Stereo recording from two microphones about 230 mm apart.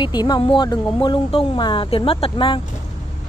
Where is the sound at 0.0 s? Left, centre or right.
Centre.